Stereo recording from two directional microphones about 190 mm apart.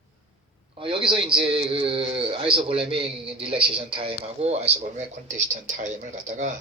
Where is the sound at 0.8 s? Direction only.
30° right (ahead or behind).